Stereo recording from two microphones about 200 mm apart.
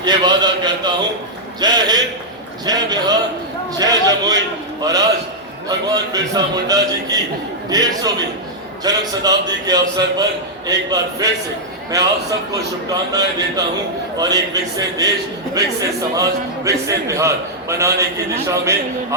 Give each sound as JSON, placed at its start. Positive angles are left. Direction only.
{"t": 0.0, "sound": "a man's voice", "side_deg": -20}
{"t": 16.1, "sound": "a man's voice", "side_deg": -15}